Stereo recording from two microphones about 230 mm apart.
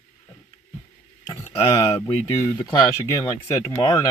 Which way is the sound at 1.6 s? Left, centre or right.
Left.